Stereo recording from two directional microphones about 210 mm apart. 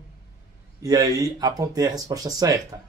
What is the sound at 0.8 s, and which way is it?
Speech, 15° right (ahead or behind).